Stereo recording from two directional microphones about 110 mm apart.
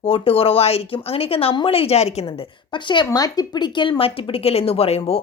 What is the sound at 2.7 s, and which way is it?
Speech, 45° left (ahead or behind).